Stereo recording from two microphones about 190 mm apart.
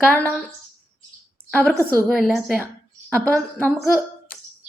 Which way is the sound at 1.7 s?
15° right (ahead or behind).